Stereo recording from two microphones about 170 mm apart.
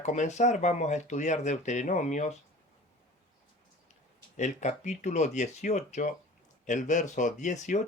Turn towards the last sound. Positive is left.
turn(degrees=45)  # may be behind; listen again after turning